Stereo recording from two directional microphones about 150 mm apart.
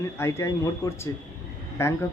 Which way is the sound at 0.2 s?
20° left (ahead or behind).